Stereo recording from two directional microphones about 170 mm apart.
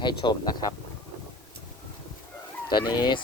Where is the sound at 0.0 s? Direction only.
25° left (ahead or behind).